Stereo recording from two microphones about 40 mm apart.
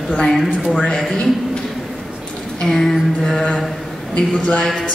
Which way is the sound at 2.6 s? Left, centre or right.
Centre.